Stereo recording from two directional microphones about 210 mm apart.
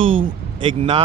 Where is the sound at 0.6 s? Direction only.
25° right (ahead or behind).